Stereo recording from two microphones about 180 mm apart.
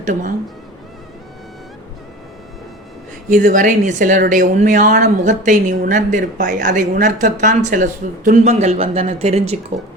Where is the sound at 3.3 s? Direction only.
45° right (ahead or behind).